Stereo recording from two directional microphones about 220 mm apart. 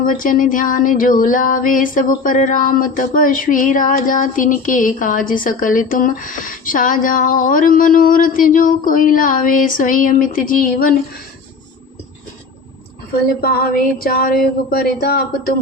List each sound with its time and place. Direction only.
0.0 s music: 40° left (ahead or behind)
13.4 s a sound: 45° left (ahead or behind)
14.7 s music: 40° left (ahead or behind)